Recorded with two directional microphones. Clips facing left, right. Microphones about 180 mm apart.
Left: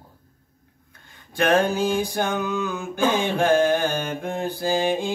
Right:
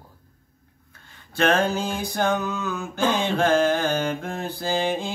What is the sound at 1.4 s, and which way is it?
Mantra, 15° left (ahead or behind).